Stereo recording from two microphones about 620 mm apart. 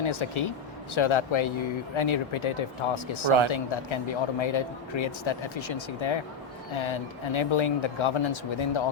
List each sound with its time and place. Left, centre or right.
0.0 s speech: left